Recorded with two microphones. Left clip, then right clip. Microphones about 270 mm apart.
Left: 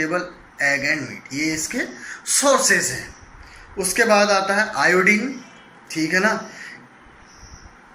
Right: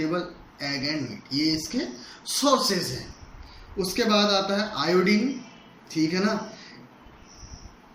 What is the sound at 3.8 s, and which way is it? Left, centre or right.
Speech, centre.